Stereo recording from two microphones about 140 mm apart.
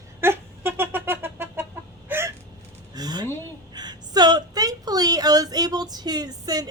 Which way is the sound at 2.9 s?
30° right (ahead or behind).